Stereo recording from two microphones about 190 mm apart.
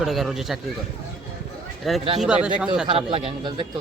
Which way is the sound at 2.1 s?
5° right (ahead or behind).